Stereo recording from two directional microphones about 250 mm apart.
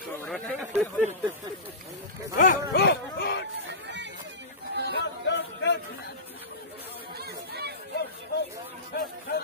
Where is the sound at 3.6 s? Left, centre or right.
Right.